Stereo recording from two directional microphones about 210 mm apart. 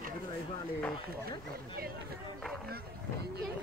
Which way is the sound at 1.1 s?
45° right (ahead or behind).